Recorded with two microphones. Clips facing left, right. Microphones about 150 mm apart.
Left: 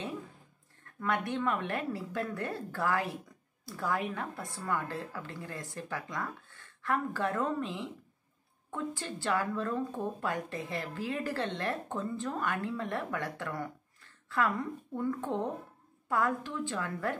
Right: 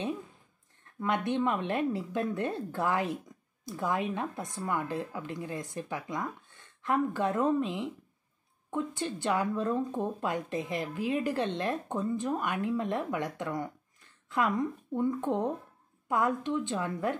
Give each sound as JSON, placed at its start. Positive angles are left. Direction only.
{"t": 0.9, "sound": "a woman's voice", "side_deg": -20}